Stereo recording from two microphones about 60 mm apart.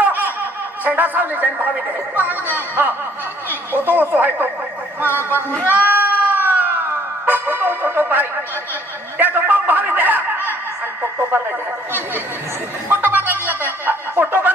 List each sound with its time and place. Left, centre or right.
0.0 s speech: right
5.7 s a sound: right
9.2 s chuckle: right
12.9 s speech: right